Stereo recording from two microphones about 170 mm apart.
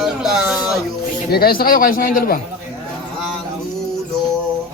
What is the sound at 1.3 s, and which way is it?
Speech, 65° left (ahead or behind).